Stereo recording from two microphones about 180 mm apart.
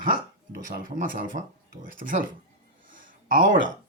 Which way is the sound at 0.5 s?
50° right (ahead or behind).